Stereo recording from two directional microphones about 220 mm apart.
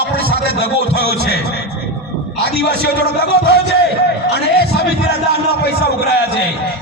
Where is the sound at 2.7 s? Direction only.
45° right (ahead or behind).